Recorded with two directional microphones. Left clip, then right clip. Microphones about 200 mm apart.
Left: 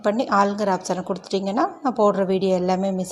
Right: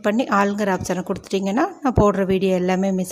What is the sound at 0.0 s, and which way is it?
A woman's voice, 25° right (ahead or behind).